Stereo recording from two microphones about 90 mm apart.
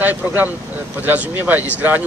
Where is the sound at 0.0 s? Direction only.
20° right (ahead or behind).